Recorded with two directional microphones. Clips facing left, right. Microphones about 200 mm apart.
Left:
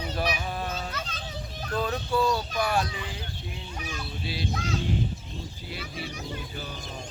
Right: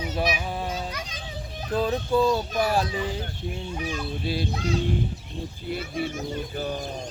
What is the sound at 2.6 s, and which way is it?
Speech, 35° right (ahead or behind).